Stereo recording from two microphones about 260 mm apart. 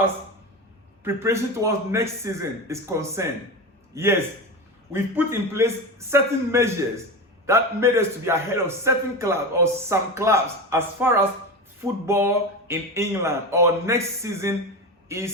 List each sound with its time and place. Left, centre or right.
1.0 s a man's voice: centre